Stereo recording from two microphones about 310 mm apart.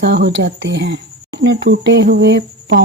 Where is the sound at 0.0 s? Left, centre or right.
Right.